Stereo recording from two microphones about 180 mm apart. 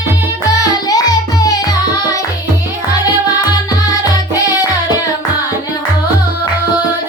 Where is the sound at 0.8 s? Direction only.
20° left (ahead or behind).